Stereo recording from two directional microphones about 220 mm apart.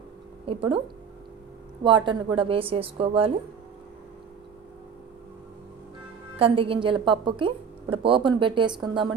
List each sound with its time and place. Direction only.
0.5 s a woman's voice: 25° right (ahead or behind)
6.3 s a woman's voice: 25° right (ahead or behind)